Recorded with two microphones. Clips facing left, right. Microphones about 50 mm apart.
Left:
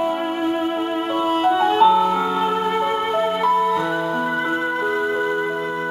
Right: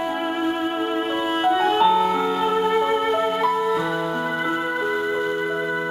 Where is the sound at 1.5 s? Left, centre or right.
Centre.